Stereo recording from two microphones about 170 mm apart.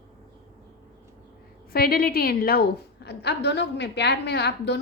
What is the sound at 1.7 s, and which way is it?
A woman's voice, 60° left (ahead or behind).